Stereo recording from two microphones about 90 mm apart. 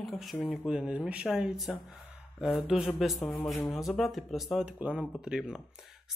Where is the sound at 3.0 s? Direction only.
Centre (ahead or behind).